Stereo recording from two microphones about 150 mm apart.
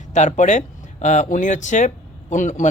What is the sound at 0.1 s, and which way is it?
A man's voice, 50° left (ahead or behind).